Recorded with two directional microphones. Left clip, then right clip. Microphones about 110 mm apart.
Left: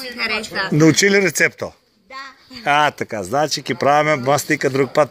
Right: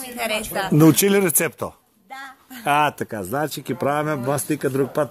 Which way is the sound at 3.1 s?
15° right (ahead or behind).